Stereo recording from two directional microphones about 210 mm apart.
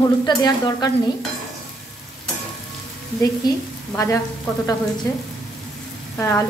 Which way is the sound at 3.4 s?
15° left (ahead or behind).